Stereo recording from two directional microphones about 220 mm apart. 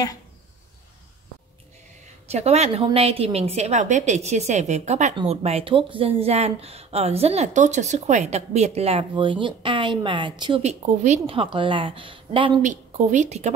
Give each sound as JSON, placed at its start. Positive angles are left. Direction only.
{"t": 2.2, "sound": "a woman's voice", "side_deg": -30}